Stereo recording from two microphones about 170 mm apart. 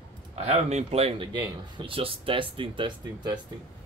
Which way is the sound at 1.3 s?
25° right (ahead or behind).